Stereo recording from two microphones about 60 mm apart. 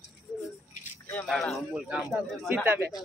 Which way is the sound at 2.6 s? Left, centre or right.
Right.